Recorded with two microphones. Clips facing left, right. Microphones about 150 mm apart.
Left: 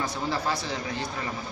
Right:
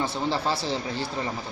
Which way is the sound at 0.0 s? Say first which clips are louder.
Right 2 dB; 30° right (ahead or behind).